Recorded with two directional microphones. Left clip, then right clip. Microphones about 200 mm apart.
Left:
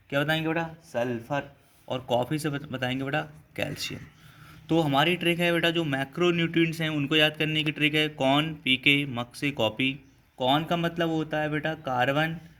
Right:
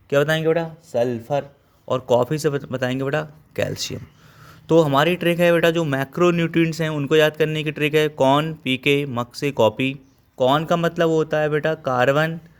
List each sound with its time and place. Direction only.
0.1 s speech: 50° right (ahead or behind)